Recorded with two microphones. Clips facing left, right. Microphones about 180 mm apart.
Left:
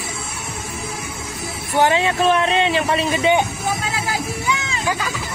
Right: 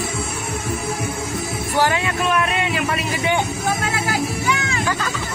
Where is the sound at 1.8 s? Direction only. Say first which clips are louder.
Left 4 dB; 25° left (ahead or behind).